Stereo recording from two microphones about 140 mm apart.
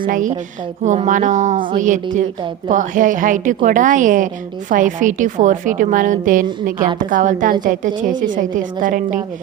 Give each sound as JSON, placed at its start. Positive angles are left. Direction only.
{"t": 0.1, "sound": "a woman's voice", "side_deg": -70}